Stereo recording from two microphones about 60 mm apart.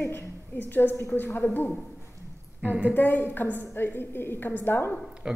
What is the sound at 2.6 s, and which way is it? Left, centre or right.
Speech, right.